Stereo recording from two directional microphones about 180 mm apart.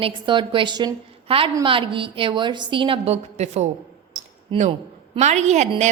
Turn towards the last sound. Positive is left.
turn(degrees=-40)  # may be behind; listen again after turning